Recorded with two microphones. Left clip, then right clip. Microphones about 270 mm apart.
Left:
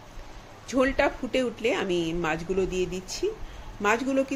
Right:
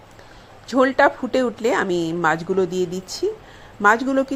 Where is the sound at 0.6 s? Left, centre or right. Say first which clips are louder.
Right 8 dB; centre.